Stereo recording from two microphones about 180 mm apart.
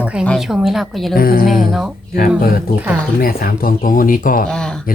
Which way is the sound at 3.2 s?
55° left (ahead or behind).